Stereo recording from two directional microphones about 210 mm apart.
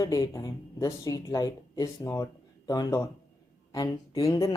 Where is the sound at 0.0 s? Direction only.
15° left (ahead or behind).